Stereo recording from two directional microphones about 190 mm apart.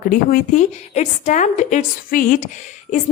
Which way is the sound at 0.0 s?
50° left (ahead or behind).